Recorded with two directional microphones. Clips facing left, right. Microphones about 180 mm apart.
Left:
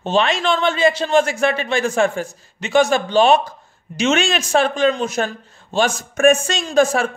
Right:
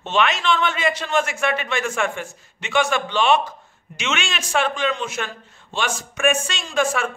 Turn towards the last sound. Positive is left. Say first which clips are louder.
# left 6 dB
turn(degrees=40)  # may be behind; listen again after turning